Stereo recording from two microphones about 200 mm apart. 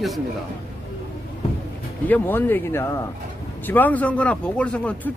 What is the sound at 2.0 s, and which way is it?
Speech, 10° left (ahead or behind).